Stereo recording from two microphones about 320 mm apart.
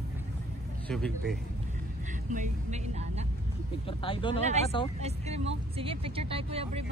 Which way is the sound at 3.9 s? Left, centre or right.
Centre.